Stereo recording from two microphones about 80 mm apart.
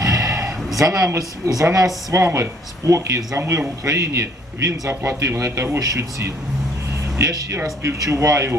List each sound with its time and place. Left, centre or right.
0.0 s a sound: right
0.8 s speech: right
2.1 s a man's voice: right
5.8 s a man's voice: right